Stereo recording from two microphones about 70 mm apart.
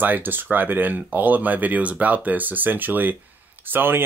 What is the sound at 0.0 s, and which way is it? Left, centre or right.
Speech, right.